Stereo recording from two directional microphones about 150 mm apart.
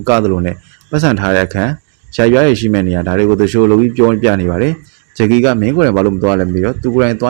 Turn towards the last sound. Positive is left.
turn(degrees=-20)  # may be behind; listen again after turning